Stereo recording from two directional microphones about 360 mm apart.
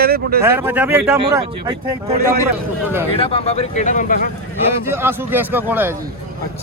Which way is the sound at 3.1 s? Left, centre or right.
Centre.